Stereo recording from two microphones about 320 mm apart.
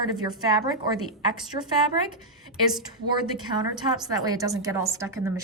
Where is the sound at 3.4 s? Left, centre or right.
Centre.